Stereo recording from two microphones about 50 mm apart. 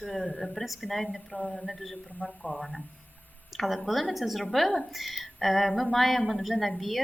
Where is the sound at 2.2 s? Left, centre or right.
Centre.